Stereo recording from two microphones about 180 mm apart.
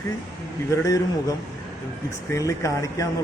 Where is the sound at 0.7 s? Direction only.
20° left (ahead or behind).